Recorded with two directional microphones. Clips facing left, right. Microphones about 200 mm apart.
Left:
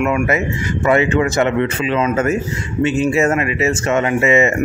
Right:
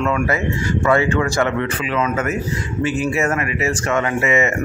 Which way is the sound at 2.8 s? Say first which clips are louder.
Left 5 dB; 25° left (ahead or behind).